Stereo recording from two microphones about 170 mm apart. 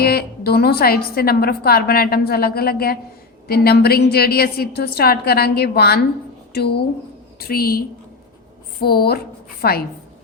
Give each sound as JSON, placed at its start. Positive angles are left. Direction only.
{"t": 0.0, "sound": "a woman's voice", "side_deg": 65}
{"t": 7.3, "sound": "a woman's voice", "side_deg": 60}